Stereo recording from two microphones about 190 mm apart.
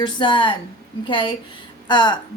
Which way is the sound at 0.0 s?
25° left (ahead or behind).